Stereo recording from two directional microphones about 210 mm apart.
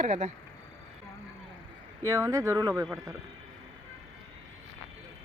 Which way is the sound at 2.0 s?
15° right (ahead or behind).